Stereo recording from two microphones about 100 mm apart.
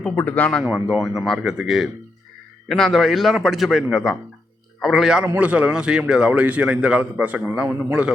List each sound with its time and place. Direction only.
0.2 s speech: 15° left (ahead or behind)
0.6 s a man's voice: 5° right (ahead or behind)